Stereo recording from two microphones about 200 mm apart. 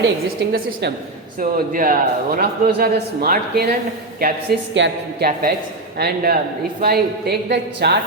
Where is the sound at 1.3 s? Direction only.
45° right (ahead or behind).